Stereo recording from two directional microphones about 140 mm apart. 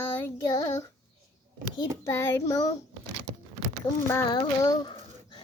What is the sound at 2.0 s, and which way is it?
Child singing, 20° left (ahead or behind).